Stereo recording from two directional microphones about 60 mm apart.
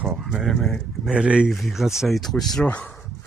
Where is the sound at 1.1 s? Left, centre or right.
Centre.